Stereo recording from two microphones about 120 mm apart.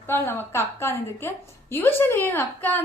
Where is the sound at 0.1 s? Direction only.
20° left (ahead or behind).